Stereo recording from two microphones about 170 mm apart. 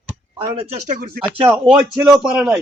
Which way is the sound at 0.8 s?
50° right (ahead or behind).